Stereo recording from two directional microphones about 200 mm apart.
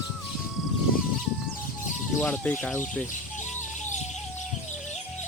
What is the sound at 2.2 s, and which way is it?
Speech, 5° left (ahead or behind).